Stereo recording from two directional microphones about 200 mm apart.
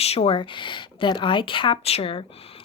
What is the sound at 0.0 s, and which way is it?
Speech, 30° left (ahead or behind).